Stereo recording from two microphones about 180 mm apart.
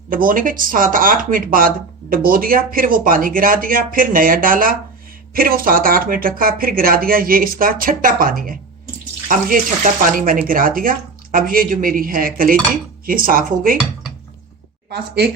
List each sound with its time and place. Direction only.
0.1 s speech: 50° right (ahead or behind)
14.8 s speech: 65° right (ahead or behind)